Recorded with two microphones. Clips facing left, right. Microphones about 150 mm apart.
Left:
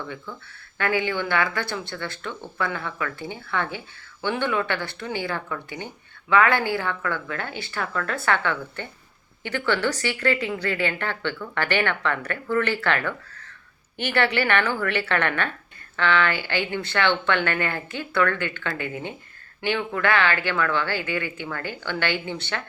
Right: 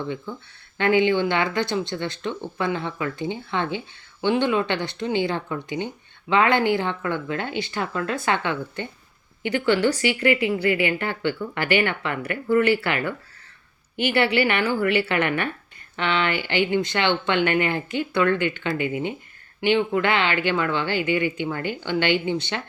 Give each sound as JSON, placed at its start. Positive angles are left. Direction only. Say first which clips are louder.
{"t": 0.3, "sound": "speech", "louder": "right 4 dB", "side_deg": -20}